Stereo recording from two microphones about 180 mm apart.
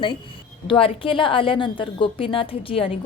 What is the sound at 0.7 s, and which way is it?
A woman's voice, 30° left (ahead or behind).